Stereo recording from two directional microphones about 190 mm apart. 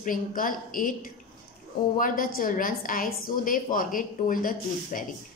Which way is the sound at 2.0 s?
45° left (ahead or behind).